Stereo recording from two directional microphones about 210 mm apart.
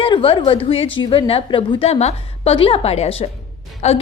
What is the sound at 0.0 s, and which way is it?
A woman's voice, 25° left (ahead or behind).